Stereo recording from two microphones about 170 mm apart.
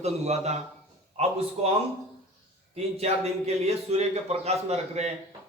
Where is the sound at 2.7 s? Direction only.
40° right (ahead or behind).